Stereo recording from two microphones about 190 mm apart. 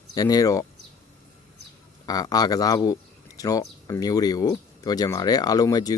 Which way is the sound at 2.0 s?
20° left (ahead or behind).